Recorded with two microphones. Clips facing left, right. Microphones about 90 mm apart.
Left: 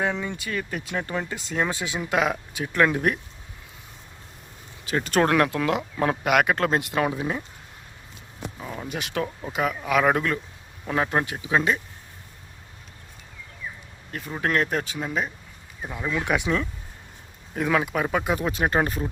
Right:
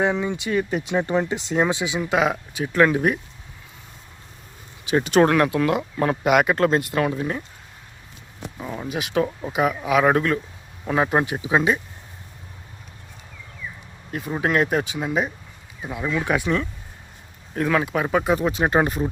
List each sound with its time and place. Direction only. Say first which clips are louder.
0.0 s speech: right 5 dB; 15° right (ahead or behind)
1.7 s speech: right 3 dB; 5° right (ahead or behind)
5.0 s speech: right 3 dB; 5° right (ahead or behind)
7.0 s speech: right 2 dB; 10° left (ahead or behind)
8.5 s speech: right 5 dB; 5° right (ahead or behind)
14.1 s speech: right 3 dB; 15° right (ahead or behind)